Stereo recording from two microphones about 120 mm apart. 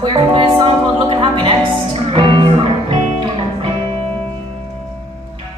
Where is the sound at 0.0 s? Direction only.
45° right (ahead or behind).